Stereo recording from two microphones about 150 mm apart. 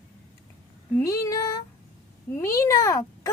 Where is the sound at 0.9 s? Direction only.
20° left (ahead or behind).